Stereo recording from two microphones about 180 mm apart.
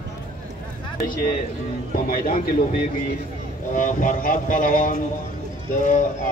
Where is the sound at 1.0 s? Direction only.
50° left (ahead or behind).